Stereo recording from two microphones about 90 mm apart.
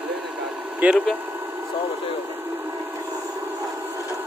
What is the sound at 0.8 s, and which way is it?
Speech, 20° right (ahead or behind).